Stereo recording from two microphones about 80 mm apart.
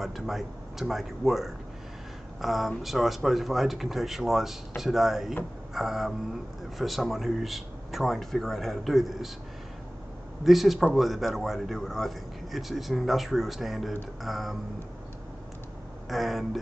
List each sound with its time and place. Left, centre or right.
0.0 s a man's voice: centre
10.4 s a man's voice: centre
16.1 s a man's voice: centre